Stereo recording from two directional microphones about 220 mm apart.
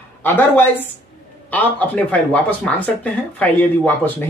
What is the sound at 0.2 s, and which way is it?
Speech, 10° left (ahead or behind).